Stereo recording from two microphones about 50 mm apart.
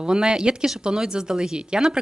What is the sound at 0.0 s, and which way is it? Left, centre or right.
Speech, centre.